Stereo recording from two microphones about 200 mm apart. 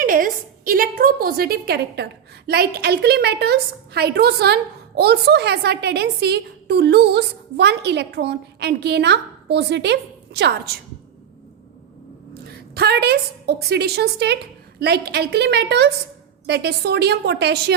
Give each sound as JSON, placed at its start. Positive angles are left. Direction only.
{"t": 0.0, "sound": "a sound", "side_deg": -45}
{"t": 2.5, "sound": "a woman's voice", "side_deg": -50}
{"t": 12.7, "sound": "a woman's voice", "side_deg": -55}